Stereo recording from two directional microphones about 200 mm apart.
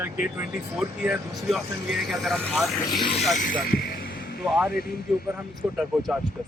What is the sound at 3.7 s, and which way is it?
Music, 45° left (ahead or behind).